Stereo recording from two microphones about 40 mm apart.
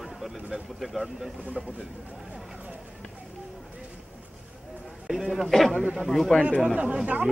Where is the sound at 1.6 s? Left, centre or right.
Right.